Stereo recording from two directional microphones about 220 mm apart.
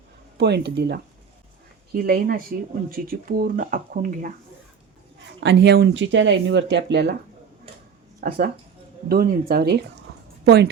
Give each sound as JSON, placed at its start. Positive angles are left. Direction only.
{"t": 0.3, "sound": "speech", "side_deg": -50}
{"t": 2.0, "sound": "speech", "side_deg": -45}
{"t": 5.4, "sound": "speech", "side_deg": -50}
{"t": 8.2, "sound": "a woman's voice", "side_deg": -40}